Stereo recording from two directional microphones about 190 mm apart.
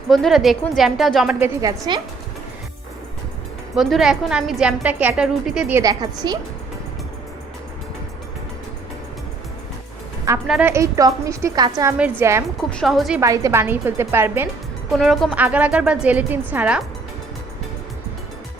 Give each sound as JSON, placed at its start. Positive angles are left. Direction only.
{"t": 0.1, "sound": "a woman's voice", "side_deg": 0}
{"t": 1.6, "sound": "a woman's voice", "side_deg": -20}
{"t": 3.8, "sound": "a woman's voice", "side_deg": 0}
{"t": 10.4, "sound": "a woman's voice", "side_deg": 0}
{"t": 10.7, "sound": "a woman's voice", "side_deg": -15}
{"t": 12.7, "sound": "a woman's voice", "side_deg": 0}
{"t": 13.2, "sound": "a woman's voice", "side_deg": -15}
{"t": 14.9, "sound": "a woman's voice", "side_deg": 0}